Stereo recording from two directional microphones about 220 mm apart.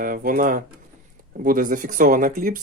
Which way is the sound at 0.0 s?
40° right (ahead or behind).